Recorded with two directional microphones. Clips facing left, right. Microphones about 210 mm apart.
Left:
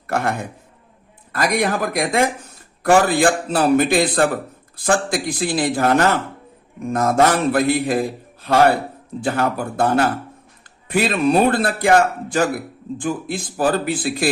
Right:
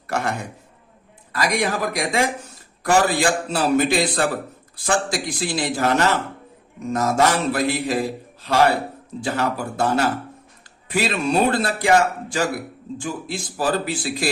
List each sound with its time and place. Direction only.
0.1 s a man's voice: 55° left (ahead or behind)